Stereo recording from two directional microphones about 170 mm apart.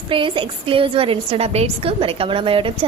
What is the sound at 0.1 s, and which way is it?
A woman's voice, 30° right (ahead or behind).